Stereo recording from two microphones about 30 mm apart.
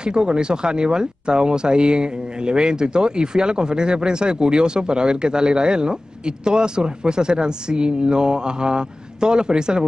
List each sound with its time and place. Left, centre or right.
0.0 s speech: right